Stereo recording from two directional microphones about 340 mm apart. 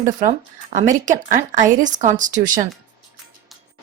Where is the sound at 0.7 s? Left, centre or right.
Right.